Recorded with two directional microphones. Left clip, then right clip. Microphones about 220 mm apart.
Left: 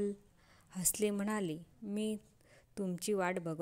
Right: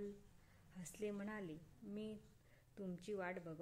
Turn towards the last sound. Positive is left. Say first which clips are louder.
# left 12 dB
turn(degrees=40)  # may be behind; listen again after turning